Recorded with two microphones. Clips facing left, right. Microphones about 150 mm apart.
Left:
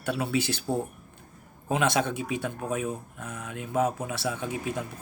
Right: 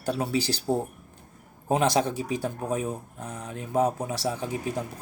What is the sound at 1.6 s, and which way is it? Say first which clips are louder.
Speech: right 2 dB; 40° right (ahead or behind).